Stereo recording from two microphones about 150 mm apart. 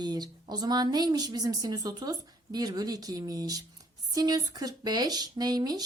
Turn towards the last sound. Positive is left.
turn(degrees=-25)  # may be behind; listen again after turning